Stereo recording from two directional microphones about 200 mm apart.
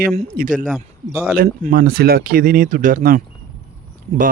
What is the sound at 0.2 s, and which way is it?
Speech, 40° right (ahead or behind).